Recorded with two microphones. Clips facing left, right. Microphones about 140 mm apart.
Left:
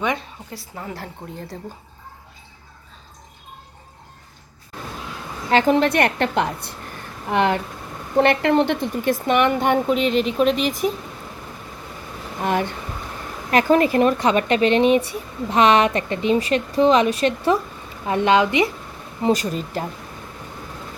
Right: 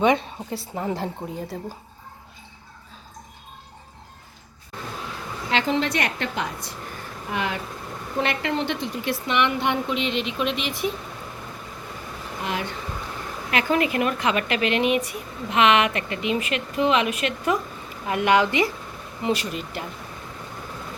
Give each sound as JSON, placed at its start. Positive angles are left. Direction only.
{"t": 0.0, "sound": "a woman's voice", "side_deg": -25}
{"t": 1.5, "sound": "speech", "side_deg": -5}
{"t": 5.5, "sound": "a woman's voice", "side_deg": 50}
{"t": 12.4, "sound": "speech", "side_deg": 45}
{"t": 19.2, "sound": "speech", "side_deg": 40}